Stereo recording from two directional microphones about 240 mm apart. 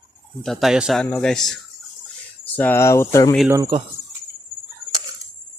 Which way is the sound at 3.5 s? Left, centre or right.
Centre.